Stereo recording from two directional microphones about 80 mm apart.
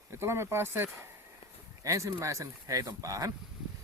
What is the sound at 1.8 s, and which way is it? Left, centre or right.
Speech, right.